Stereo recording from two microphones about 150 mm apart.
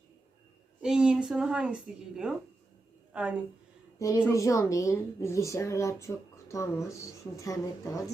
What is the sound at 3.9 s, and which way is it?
A woman's voice, 20° left (ahead or behind).